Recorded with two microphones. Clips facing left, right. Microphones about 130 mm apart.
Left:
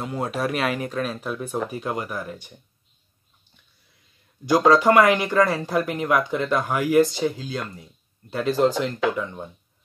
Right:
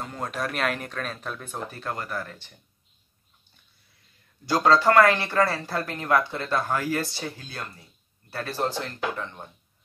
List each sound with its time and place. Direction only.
0.0 s speech: 10° left (ahead or behind)
4.5 s speech: 15° left (ahead or behind)